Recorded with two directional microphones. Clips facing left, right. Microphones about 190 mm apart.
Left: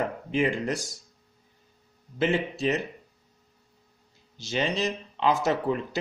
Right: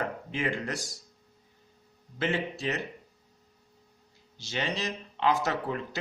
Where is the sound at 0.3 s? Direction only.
15° left (ahead or behind).